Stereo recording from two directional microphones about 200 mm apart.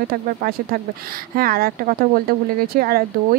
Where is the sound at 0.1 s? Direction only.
50° right (ahead or behind).